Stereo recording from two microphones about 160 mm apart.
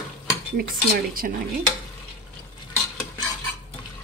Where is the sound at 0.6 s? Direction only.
65° right (ahead or behind).